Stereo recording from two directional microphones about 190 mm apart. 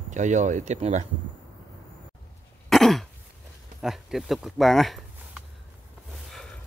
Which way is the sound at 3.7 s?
Centre (ahead or behind).